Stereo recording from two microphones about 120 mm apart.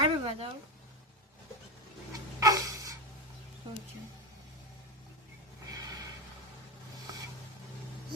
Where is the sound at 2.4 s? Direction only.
30° right (ahead or behind).